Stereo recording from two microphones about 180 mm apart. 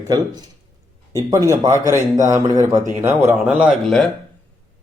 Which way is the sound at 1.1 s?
15° right (ahead or behind).